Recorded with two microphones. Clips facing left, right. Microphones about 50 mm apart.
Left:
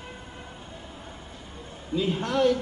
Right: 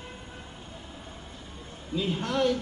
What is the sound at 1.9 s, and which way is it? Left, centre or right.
Speech, centre.